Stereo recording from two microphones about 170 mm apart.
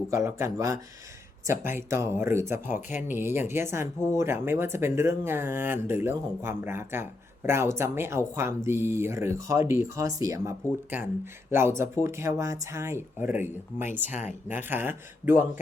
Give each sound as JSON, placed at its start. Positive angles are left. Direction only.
{"t": 0.1, "sound": "speech", "side_deg": -15}
{"t": 11.5, "sound": "speech", "side_deg": -15}
{"t": 14.1, "sound": "speech", "side_deg": 45}
{"t": 14.4, "sound": "speech", "side_deg": -10}